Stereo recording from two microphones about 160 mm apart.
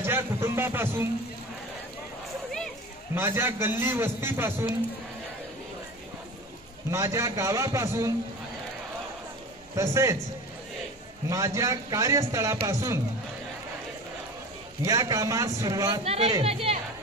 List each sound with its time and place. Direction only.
0.0 s music: 15° right (ahead or behind)
3.2 s a man's voice: 15° right (ahead or behind)
6.9 s a man's voice: 20° right (ahead or behind)
9.8 s a man's voice: 20° right (ahead or behind)
11.2 s a man's voice: 20° right (ahead or behind)
14.9 s a man's voice: 20° right (ahead or behind)
16.1 s speech: 40° right (ahead or behind)